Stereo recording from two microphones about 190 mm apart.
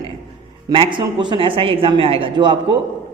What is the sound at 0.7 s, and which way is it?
A woman's voice, 25° right (ahead or behind).